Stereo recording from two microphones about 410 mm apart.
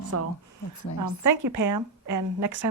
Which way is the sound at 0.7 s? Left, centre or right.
Left.